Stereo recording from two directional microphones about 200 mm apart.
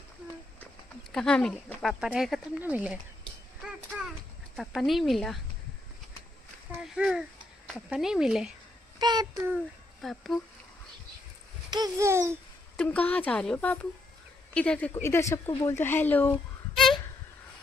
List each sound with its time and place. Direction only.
1.1 s speech: 5° left (ahead or behind)
3.9 s clip-clop: 5° right (ahead or behind)
4.6 s speech: centre (ahead or behind)
7.0 s a child's voice: centre (ahead or behind)
9.0 s speech: 20° right (ahead or behind)
10.0 s speech: centre (ahead or behind)
11.7 s speech: 15° right (ahead or behind)
12.7 s a woman's voice: 5° left (ahead or behind)